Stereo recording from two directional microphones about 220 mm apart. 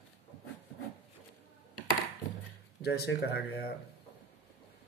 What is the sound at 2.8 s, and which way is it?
Speech, 45° left (ahead or behind).